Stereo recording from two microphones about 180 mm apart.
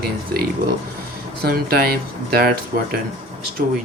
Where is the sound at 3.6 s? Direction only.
50° right (ahead or behind).